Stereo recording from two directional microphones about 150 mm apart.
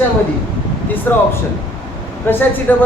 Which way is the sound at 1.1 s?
15° left (ahead or behind).